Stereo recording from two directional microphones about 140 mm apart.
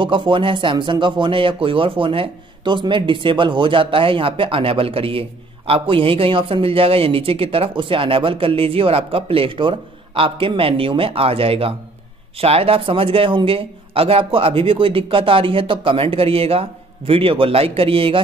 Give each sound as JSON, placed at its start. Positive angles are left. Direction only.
{"t": 0.0, "sound": "speech", "side_deg": -35}